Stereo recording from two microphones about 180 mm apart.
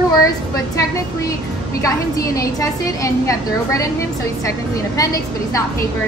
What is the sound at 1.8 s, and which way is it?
A woman's voice, 20° left (ahead or behind).